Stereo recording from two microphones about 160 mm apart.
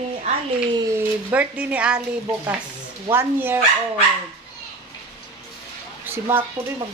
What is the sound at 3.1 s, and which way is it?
Speech, 15° right (ahead or behind).